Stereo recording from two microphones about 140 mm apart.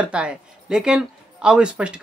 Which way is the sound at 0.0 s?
5° right (ahead or behind).